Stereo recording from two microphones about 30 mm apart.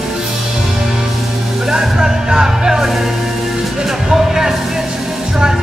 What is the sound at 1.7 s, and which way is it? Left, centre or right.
Music, centre.